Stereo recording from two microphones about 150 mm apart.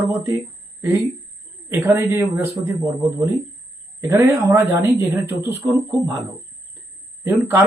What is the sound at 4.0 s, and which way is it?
Speech, 20° right (ahead or behind).